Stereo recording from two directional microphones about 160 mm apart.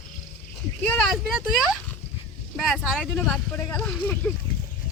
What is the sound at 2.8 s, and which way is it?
Speech, centre (ahead or behind).